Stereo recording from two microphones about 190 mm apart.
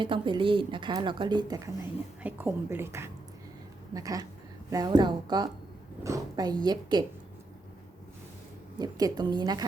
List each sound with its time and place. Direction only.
0.0 s a woman's voice: 25° right (ahead or behind)
8.8 s speech: 20° right (ahead or behind)